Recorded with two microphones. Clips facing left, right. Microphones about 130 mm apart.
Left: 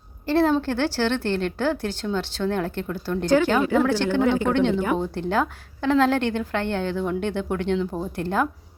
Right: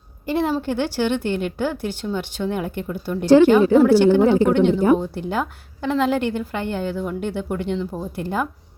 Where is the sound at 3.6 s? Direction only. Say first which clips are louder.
Right 7 dB; 30° right (ahead or behind).